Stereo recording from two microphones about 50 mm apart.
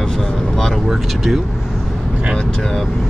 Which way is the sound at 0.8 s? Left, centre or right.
Centre.